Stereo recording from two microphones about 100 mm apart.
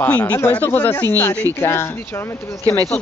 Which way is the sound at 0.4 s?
20° left (ahead or behind).